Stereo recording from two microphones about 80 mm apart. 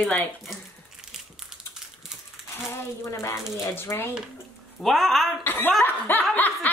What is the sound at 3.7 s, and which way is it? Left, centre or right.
Snicker, left.